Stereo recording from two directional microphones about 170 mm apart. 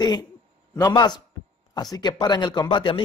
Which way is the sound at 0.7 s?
20° left (ahead or behind).